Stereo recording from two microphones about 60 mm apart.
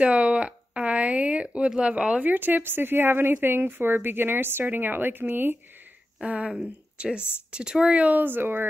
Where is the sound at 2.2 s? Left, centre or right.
Right.